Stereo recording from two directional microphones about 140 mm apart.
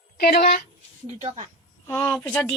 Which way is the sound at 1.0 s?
45° right (ahead or behind).